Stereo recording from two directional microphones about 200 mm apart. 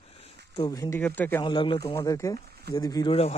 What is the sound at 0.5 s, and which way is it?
Speech, 20° left (ahead or behind).